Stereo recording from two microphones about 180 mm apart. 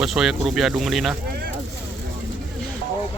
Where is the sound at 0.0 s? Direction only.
Centre (ahead or behind).